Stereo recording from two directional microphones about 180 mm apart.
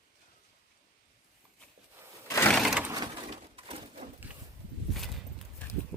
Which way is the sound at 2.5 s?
5° right (ahead or behind).